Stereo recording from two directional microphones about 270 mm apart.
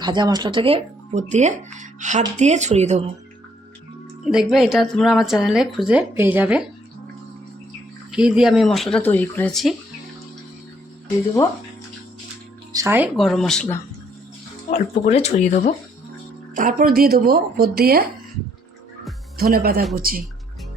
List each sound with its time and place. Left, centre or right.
0.0 s speech: centre
4.3 s speech: centre
8.1 s speech: centre
12.7 s speech: centre
14.7 s speech: left
16.6 s a woman's voice: right
19.4 s a woman's voice: right